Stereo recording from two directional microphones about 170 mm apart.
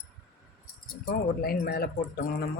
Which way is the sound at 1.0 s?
65° left (ahead or behind).